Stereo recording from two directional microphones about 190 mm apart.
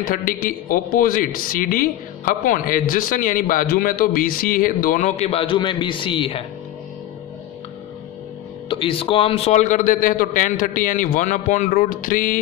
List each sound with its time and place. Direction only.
0.1 s a man's voice: 50° left (ahead or behind); by 6.4 s 30° left (ahead or behind)
8.6 s a man's voice: 30° left (ahead or behind); by 12.4 s 45° left (ahead or behind)